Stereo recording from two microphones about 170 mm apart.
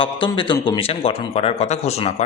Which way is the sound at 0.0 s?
30° left (ahead or behind).